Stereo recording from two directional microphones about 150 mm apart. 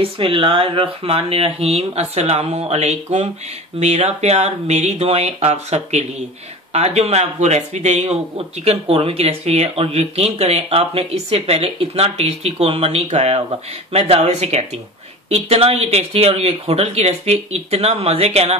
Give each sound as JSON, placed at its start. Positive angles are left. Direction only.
{"t": 0.0, "sound": "speech", "side_deg": -35}